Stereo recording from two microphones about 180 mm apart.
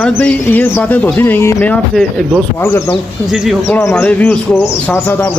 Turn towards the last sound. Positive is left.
turn(degrees=5)  # may be behind; listen again after turning